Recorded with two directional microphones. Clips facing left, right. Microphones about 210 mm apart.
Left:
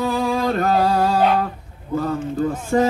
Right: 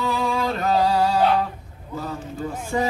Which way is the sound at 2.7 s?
55° left (ahead or behind).